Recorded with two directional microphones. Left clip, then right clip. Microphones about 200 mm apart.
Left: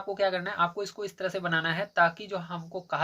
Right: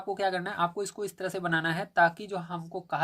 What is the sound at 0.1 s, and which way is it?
Speech, 35° right (ahead or behind).